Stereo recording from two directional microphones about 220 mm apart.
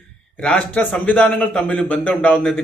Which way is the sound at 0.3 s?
5° left (ahead or behind).